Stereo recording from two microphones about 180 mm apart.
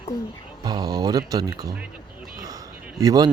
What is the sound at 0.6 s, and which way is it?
Speech, 20° right (ahead or behind).